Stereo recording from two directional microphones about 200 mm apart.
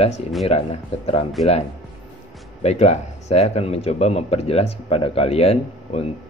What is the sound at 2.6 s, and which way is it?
Speech, 35° left (ahead or behind).